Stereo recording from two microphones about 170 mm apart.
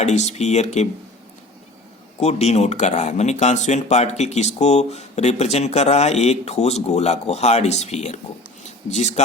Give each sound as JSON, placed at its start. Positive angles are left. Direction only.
{"t": 0.0, "sound": "speech", "side_deg": 40}
{"t": 2.2, "sound": "speech", "side_deg": 40}